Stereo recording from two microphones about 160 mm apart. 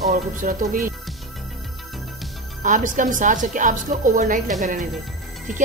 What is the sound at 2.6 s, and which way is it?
Speech, 55° right (ahead or behind).